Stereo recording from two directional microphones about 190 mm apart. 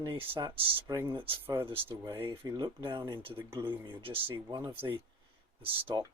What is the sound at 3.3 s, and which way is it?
Speech, 10° right (ahead or behind).